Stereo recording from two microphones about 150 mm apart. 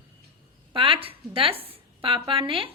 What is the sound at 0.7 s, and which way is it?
A woman's voice, 35° right (ahead or behind).